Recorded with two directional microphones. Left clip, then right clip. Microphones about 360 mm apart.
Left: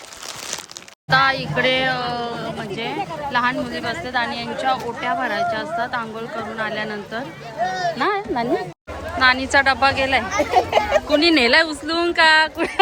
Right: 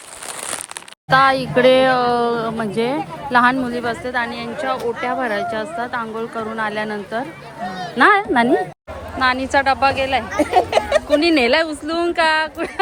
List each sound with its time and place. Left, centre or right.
1.1 s speech: centre
7.9 s speech: right
9.1 s speech: centre
10.4 s speech: right
11.1 s speech: centre